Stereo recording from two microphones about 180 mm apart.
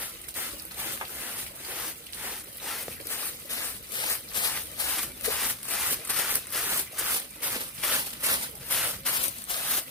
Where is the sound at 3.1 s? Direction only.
20° left (ahead or behind).